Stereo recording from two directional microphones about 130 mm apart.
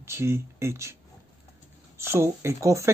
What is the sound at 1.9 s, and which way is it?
Speech, 20° right (ahead or behind).